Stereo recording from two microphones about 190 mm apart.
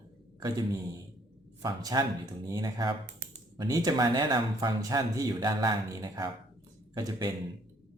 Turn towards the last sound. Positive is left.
turn(degrees=-20)  # may be behind; listen again after turning